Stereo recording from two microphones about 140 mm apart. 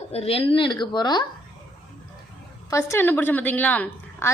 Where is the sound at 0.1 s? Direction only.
45° left (ahead or behind).